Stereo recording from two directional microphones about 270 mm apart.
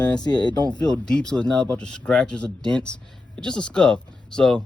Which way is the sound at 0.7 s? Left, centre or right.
Centre.